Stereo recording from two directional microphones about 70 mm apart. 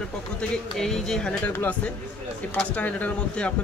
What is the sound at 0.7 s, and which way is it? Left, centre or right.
Speech, centre.